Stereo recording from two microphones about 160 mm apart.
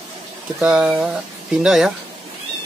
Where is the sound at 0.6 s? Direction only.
5° right (ahead or behind).